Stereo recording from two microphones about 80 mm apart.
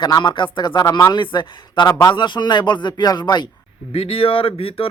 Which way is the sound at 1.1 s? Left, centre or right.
Left.